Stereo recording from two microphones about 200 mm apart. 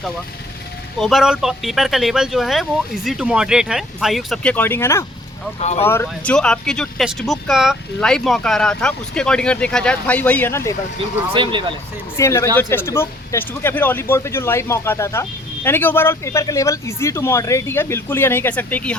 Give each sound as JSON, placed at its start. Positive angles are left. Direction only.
{"t": 0.9, "sound": "speech", "side_deg": 0}
{"t": 11.4, "sound": "speech", "side_deg": -25}
{"t": 12.1, "sound": "speech", "side_deg": 15}